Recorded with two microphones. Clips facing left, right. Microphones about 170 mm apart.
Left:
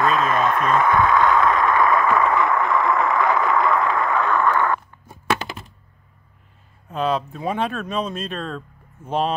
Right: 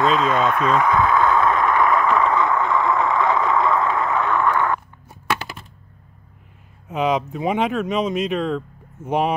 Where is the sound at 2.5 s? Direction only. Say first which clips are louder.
Even; centre (ahead or behind).